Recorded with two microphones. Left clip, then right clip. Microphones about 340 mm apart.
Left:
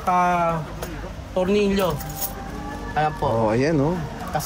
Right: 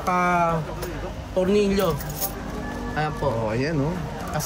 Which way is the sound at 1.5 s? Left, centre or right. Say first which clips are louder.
Left 1 dB; centre.